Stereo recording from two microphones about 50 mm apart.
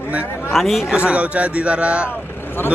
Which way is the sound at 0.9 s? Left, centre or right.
Right.